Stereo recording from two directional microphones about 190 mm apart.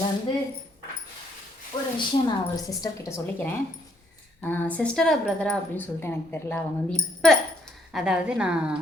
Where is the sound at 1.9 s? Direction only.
25° left (ahead or behind); by 8.8 s 5° right (ahead or behind).